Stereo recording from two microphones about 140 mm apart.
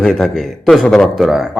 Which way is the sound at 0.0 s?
Centre (ahead or behind).